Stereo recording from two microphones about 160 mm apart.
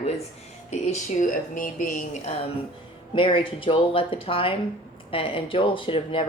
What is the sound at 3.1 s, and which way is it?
Speech, 30° left (ahead or behind).